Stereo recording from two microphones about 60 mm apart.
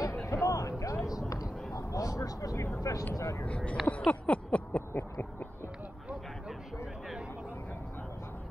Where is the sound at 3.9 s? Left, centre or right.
Left.